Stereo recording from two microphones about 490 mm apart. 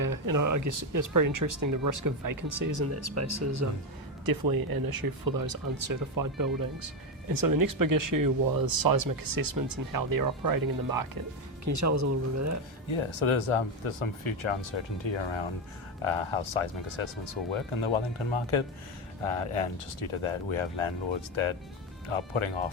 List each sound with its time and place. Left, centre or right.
0.0 s speech: right
4.3 s speech: right
12.9 s speech: left
16.0 s speech: left
19.2 s speech: left